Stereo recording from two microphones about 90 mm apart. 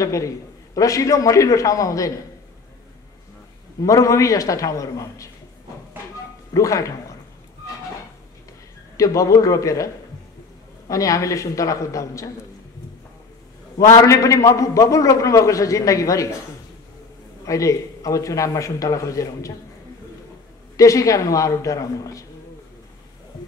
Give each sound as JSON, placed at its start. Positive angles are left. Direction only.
{"t": 0.0, "sound": "a man's voice", "side_deg": 35}
{"t": 3.8, "sound": "a man's voice", "side_deg": 35}
{"t": 6.5, "sound": "speech", "side_deg": 40}
{"t": 8.9, "sound": "a man's voice", "side_deg": 40}
{"t": 10.9, "sound": "a man's voice", "side_deg": 35}
{"t": 13.7, "sound": "a man's voice", "side_deg": 35}
{"t": 17.5, "sound": "a man's voice", "side_deg": 40}
{"t": 20.7, "sound": "a man's voice", "side_deg": 40}